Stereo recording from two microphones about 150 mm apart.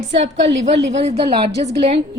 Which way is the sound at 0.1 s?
45° right (ahead or behind).